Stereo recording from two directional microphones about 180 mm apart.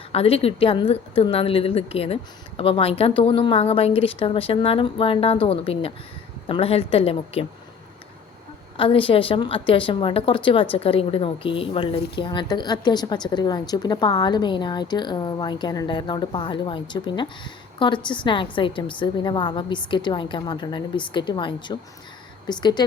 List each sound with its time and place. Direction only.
0.1 s a woman's voice: 35° left (ahead or behind)
8.8 s a woman's voice: 30° left (ahead or behind)